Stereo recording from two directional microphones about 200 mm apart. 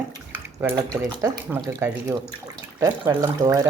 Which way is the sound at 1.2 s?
10° right (ahead or behind).